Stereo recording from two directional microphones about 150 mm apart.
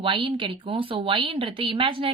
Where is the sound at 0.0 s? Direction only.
35° right (ahead or behind).